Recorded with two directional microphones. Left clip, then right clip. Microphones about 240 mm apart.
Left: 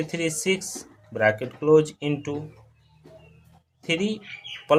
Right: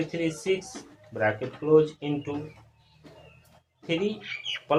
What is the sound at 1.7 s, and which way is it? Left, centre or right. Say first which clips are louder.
Speech: even; left.